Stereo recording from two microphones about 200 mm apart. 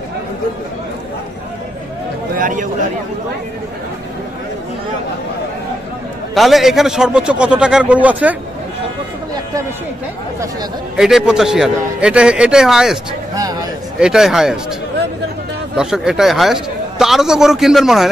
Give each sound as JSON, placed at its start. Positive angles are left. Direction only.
{"t": 2.3, "sound": "chatter", "side_deg": -40}
{"t": 6.3, "sound": "a man's voice", "side_deg": 0}
{"t": 11.0, "sound": "a man's voice", "side_deg": 0}
{"t": 13.4, "sound": "a sound", "side_deg": -20}
{"t": 13.9, "sound": "a man's voice", "side_deg": -5}
{"t": 15.7, "sound": "a man's voice", "side_deg": -5}